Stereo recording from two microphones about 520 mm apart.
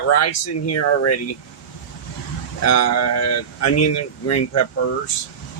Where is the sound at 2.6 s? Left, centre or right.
Left.